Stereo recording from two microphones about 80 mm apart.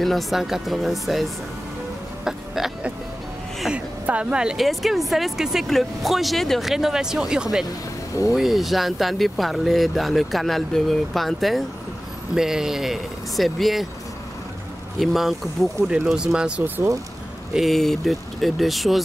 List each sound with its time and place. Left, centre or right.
0.0 s speech: centre
2.2 s a sound: centre
3.7 s speech: centre
15.0 s speech: centre
17.6 s speech: centre